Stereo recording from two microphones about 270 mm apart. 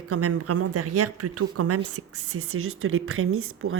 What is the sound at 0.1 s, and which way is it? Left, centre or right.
A woman's voice, right.